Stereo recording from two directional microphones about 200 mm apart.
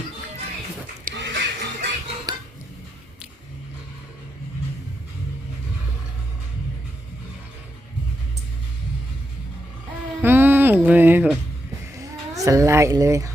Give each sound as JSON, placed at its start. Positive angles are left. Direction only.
{"t": 1.1, "sound": "music", "side_deg": -60}
{"t": 2.3, "sound": "dishes", "side_deg": -20}
{"t": 10.2, "sound": "music", "side_deg": -10}
{"t": 11.9, "sound": "speech", "side_deg": -15}